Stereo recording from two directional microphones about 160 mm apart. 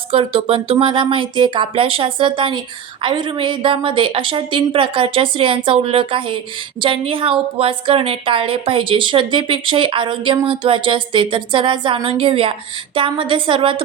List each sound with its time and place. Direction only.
0.1 s a woman's voice: 35° right (ahead or behind)